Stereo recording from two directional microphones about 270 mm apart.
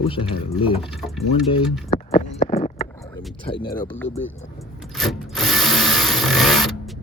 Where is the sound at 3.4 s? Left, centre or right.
Centre.